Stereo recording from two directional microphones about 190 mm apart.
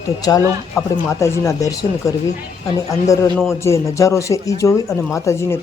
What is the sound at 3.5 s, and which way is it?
A man's voice, 15° left (ahead or behind).